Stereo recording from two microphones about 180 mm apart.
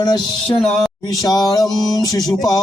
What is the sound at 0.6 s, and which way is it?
Music, centre (ahead or behind).